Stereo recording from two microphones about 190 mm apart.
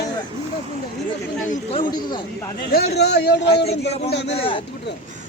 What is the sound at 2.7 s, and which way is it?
Speech, 60° left (ahead or behind).